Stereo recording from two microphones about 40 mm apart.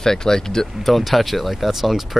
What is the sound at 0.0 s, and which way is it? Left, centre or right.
Speech, centre.